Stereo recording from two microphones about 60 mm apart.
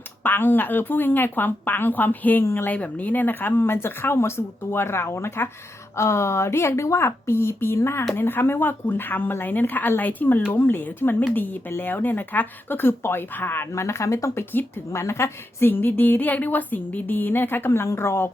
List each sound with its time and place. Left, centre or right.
0.2 s speech: left
2.4 s a woman's voice: left
2.6 s a woman's voice: left
13.7 s speech: left
14.3 s a woman's voice: left
15.7 s speech: left